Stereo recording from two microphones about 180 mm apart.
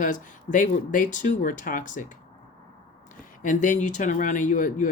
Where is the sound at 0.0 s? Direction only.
45° left (ahead or behind).